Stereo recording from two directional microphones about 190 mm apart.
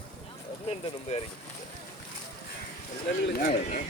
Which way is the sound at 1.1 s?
35° left (ahead or behind).